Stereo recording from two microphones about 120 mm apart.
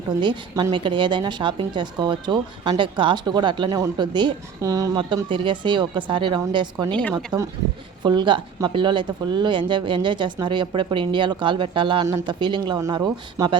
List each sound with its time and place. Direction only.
0.2 s speech: 35° right (ahead or behind)